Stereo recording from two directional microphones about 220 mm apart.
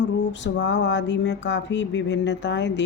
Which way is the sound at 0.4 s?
55° left (ahead or behind).